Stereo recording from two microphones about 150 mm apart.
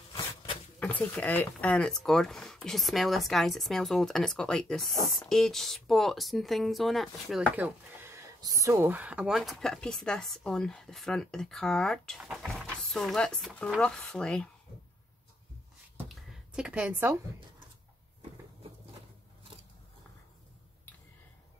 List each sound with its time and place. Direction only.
0.1 s a sound: 35° left (ahead or behind)
0.7 s speech: 10° left (ahead or behind)
7.5 s speech: 15° right (ahead or behind); by 14.5 s 5° left (ahead or behind)
16.5 s a woman's voice: 5° right (ahead or behind)